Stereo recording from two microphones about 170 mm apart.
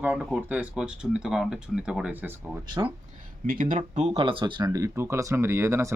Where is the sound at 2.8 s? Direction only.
20° right (ahead or behind).